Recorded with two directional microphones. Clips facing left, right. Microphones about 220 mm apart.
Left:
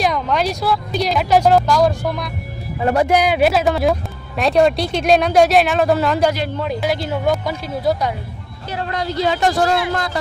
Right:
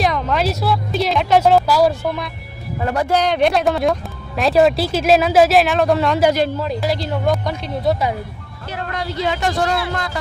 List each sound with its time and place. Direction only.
0.0 s a sound: centre (ahead or behind)
2.9 s speech: 20° left (ahead or behind)
3.2 s speech: 5° left (ahead or behind)
8.7 s speech: 35° left (ahead or behind)